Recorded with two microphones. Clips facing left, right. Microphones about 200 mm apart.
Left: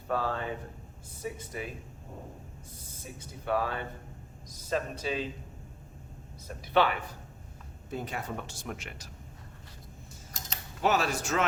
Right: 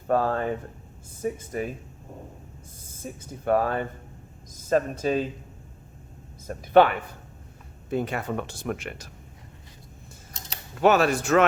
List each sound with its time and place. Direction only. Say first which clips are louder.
0.1 s speech: right 8 dB; 50° right (ahead or behind)
3.0 s speech: right 8 dB; 45° right (ahead or behind)
6.5 s speech: right 8 dB; 50° right (ahead or behind)
7.9 s speech: right 8 dB; 70° right (ahead or behind)
10.8 s speech: right 8 dB; 60° right (ahead or behind)